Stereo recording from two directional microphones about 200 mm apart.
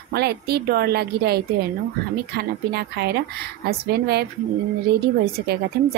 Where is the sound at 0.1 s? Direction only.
55° right (ahead or behind).